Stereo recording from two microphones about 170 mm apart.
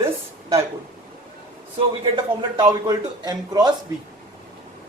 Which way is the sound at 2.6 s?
25° right (ahead or behind).